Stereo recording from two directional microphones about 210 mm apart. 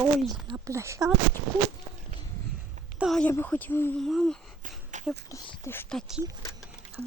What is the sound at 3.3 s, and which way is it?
Speech, 10° left (ahead or behind).